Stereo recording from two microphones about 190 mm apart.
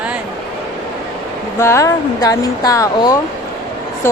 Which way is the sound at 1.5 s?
15° left (ahead or behind).